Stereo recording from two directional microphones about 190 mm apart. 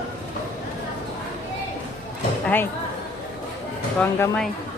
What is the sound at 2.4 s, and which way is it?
Speech, 10° left (ahead or behind).